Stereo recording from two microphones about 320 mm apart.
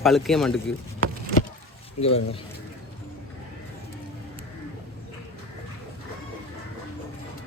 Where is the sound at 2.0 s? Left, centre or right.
Centre.